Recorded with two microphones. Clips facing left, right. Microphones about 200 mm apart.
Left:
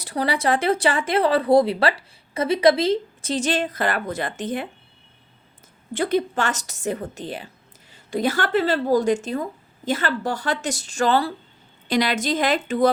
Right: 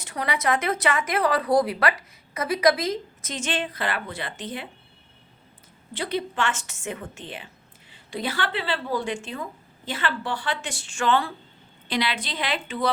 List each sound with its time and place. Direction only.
0.0 s speech: 35° left (ahead or behind)
5.9 s a woman's voice: 45° left (ahead or behind)